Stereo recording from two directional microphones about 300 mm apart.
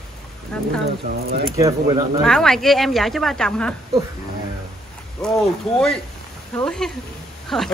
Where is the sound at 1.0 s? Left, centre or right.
Right.